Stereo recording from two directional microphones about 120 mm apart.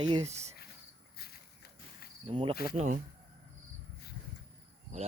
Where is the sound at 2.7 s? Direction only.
90° right.